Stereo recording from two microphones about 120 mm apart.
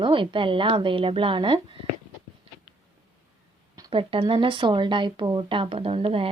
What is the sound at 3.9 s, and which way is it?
Speech, 50° right (ahead or behind).